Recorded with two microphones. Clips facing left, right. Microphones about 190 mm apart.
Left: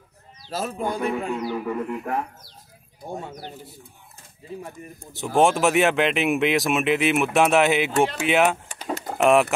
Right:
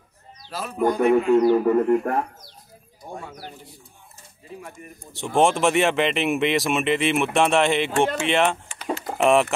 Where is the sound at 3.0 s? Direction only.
25° left (ahead or behind).